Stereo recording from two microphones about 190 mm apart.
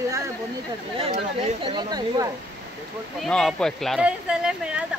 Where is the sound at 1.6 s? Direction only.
20° right (ahead or behind).